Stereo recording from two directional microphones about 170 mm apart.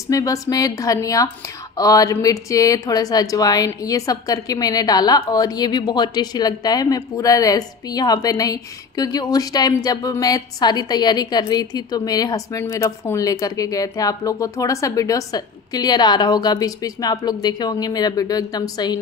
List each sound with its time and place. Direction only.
0.1 s speech: 20° left (ahead or behind)